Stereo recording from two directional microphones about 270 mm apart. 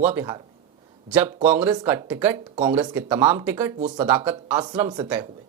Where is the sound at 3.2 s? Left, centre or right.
Centre.